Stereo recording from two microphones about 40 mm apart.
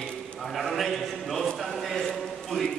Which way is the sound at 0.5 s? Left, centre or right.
Centre.